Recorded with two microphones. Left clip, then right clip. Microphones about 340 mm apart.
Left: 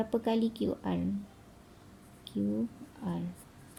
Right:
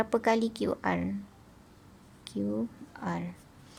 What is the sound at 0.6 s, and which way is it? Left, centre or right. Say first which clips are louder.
Speech: right 4 dB; right.